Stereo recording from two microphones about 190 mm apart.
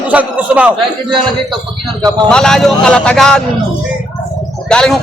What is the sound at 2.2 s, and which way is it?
Speech, 5° left (ahead or behind).